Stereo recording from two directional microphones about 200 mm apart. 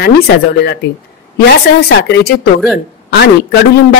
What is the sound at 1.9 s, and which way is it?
Speech, 50° left (ahead or behind).